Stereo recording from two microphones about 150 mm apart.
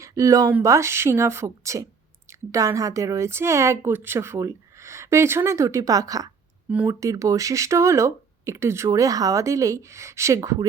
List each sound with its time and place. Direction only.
0.0 s a woman's voice: 20° right (ahead or behind)
6.7 s speech: 10° right (ahead or behind)
7.0 s a woman's voice: 20° right (ahead or behind)